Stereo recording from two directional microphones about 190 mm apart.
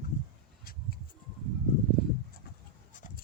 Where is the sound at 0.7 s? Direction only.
50° left (ahead or behind).